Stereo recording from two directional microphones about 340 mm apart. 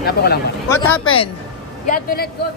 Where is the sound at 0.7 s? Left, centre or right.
Centre.